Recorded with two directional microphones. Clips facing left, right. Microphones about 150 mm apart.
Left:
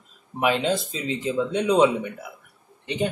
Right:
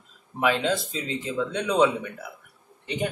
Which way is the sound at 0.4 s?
20° left (ahead or behind).